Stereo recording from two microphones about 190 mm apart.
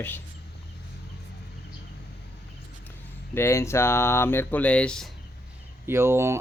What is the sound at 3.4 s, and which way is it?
Speech, 15° left (ahead or behind).